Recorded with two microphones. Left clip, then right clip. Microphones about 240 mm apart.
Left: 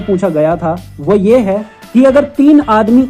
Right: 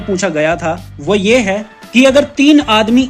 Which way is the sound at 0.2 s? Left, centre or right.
Centre.